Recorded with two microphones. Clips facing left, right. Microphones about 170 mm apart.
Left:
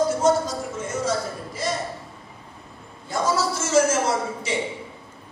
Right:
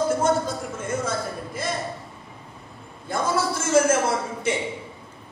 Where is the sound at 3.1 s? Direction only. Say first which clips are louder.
Left 1 dB; 55° right (ahead or behind).